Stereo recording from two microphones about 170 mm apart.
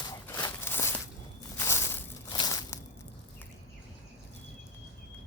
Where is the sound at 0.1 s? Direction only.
10° left (ahead or behind).